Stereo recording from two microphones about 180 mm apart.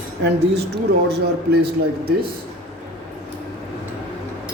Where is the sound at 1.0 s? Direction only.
65° right (ahead or behind).